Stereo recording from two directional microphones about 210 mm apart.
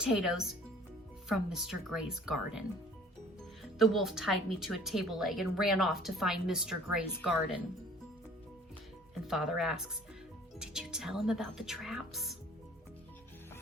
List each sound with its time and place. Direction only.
0.0 s speech: centre (ahead or behind)
9.2 s speech: centre (ahead or behind)